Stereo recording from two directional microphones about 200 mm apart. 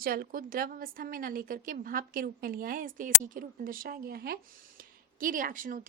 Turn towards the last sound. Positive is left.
turn(degrees=-40)  # may be behind; listen again after turning